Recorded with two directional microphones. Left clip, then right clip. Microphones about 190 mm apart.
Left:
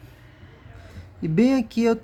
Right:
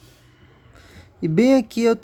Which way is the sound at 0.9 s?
40° right (ahead or behind).